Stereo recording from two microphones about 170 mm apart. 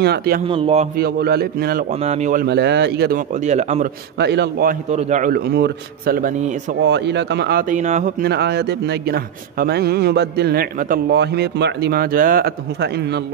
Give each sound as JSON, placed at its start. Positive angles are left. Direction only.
{"t": 0.0, "sound": "a man's voice", "side_deg": -70}
{"t": 0.5, "sound": "speech", "side_deg": -35}
{"t": 0.9, "sound": "a man's voice", "side_deg": -65}
{"t": 1.9, "sound": "speech", "side_deg": -40}
{"t": 2.4, "sound": "a man's voice", "side_deg": -80}
{"t": 3.2, "sound": "speech", "side_deg": -40}
{"t": 4.2, "sound": "a man's voice", "side_deg": -85}
{"t": 4.9, "sound": "speech", "side_deg": -45}
{"t": 5.3, "sound": "a man's voice", "side_deg": -70}
{"t": 6.8, "sound": "speech", "side_deg": -90}
{"t": 7.7, "sound": "speech", "side_deg": -45}
{"t": 8.2, "sound": "a man's voice", "side_deg": -75}
{"t": 11.1, "sound": "a man's voice", "side_deg": -85}